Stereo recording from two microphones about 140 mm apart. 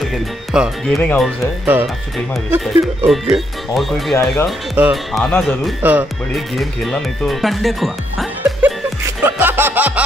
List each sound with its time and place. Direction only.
0.0 s speech: centre (ahead or behind)
1.7 s speech: 15° right (ahead or behind)
3.1 s speech: centre (ahead or behind)
4.1 s speech: 20° left (ahead or behind)
4.8 s speech: 10° right (ahead or behind)
5.1 s speech: 5° left (ahead or behind)
5.8 s speech: 10° right (ahead or behind)
6.3 s speech: centre (ahead or behind)
9.2 s music: 15° right (ahead or behind)